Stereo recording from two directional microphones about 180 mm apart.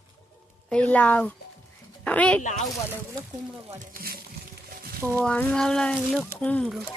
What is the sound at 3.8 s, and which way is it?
Speech, 55° right (ahead or behind).